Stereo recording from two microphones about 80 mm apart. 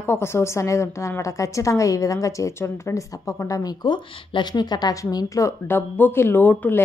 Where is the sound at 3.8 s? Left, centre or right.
Left.